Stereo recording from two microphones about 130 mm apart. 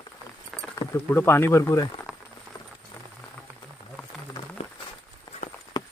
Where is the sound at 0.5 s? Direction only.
15° left (ahead or behind).